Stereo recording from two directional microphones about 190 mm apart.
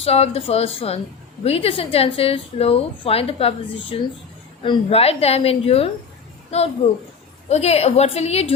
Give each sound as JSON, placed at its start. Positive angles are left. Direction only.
{"t": 0.0, "sound": "a woman's voice", "side_deg": 35}
{"t": 4.6, "sound": "a woman's voice", "side_deg": 30}